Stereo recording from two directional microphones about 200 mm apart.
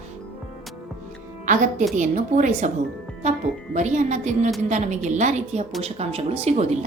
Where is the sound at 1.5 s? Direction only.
40° right (ahead or behind).